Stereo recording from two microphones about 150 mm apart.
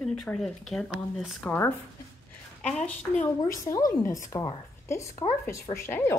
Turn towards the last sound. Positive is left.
turn(degrees=15)  # may be behind; listen again after turning